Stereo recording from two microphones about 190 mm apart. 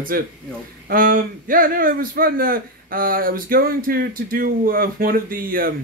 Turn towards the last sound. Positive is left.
turn(degrees=-50)  # may be behind; listen again after turning